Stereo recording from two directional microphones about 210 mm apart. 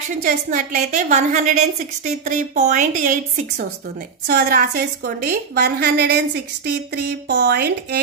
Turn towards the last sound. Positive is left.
turn(degrees=-50)  # may be behind; listen again after turning